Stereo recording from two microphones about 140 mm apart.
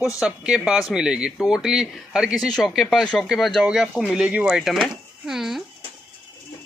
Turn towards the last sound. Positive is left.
turn(degrees=0)  # may be behind; listen again after turning